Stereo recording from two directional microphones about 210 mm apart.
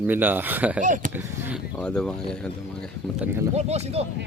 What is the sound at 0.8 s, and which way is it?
Speech, 40° right (ahead or behind).